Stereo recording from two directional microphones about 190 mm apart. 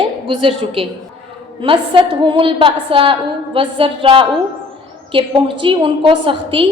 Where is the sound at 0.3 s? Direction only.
30° right (ahead or behind).